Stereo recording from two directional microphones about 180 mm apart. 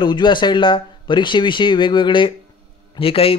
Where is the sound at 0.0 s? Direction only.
25° left (ahead or behind).